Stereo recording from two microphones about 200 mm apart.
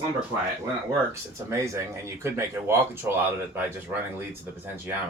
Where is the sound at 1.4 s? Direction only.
15° right (ahead or behind).